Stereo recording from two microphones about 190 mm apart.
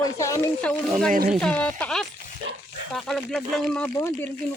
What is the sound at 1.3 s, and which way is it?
Speech, 5° left (ahead or behind).